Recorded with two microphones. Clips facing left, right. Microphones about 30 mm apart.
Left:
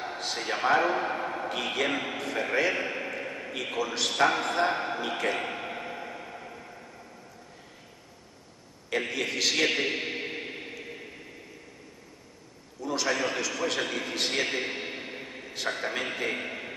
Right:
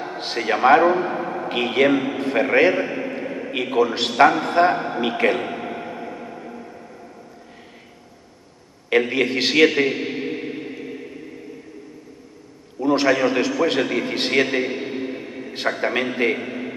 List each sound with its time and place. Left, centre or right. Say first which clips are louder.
0.2 s a man's voice: right 11 dB; right
0.9 s a man's voice: right 6 dB; centre
1.5 s a man's voice: right 12 dB; right
2.9 s a sound: right 7 dB; centre
3.5 s a man's voice: right 11 dB; right
5.4 s a sound: right 6 dB; centre
8.9 s a man's voice: right 11 dB; right
9.8 s music: right 7 dB; centre
12.8 s a man's voice: right 11 dB; right
14.7 s a sound: right 9 dB; centre
15.5 s a man's voice: right 9 dB; right
16.3 s a sound: right 7 dB; centre